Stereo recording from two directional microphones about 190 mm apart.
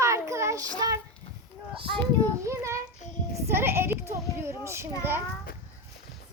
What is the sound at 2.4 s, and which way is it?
A child's voice, 15° right (ahead or behind).